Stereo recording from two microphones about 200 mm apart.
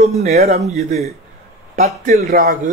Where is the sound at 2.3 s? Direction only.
45° right (ahead or behind).